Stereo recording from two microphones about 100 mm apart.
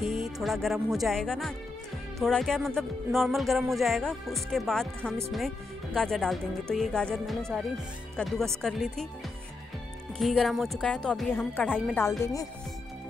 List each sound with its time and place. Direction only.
0.0 s speech: centre (ahead or behind)
10.1 s speech: centre (ahead or behind)
11.3 s speech: 15° left (ahead or behind)
12.2 s speech: 35° left (ahead or behind)